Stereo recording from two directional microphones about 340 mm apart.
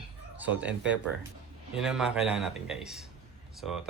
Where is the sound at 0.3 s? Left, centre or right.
Centre.